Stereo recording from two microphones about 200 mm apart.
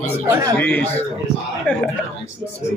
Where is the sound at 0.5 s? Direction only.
10° left (ahead or behind).